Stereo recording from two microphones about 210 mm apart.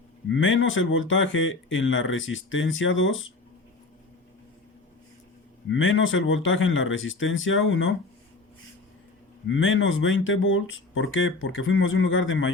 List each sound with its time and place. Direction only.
0.3 s speech: 65° left (ahead or behind)
5.6 s speech: 65° left (ahead or behind)
9.5 s speech: 65° left (ahead or behind)